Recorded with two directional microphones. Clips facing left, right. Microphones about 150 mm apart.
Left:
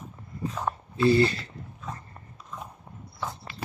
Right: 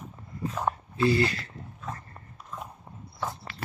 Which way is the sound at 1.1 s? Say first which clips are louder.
Left 4 dB; 30° left (ahead or behind).